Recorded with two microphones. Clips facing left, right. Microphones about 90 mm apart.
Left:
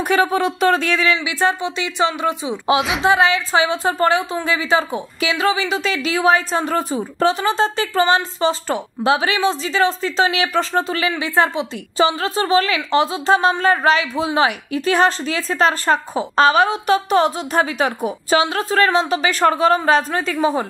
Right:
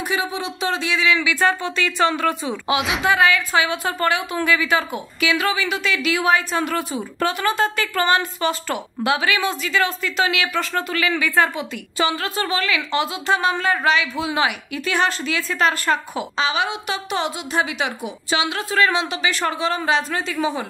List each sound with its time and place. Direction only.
0.1 s speech: 50° left (ahead or behind)
1.1 s a woman's voice: 25° left (ahead or behind)
16.3 s a woman's voice: 45° left (ahead or behind)